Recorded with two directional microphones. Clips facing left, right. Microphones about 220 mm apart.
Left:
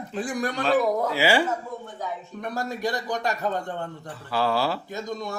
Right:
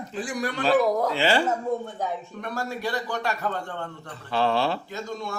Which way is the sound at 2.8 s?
15° left (ahead or behind).